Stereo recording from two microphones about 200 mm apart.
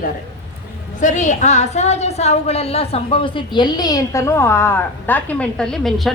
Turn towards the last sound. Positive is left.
turn(degrees=0)  # may be behind; listen again after turning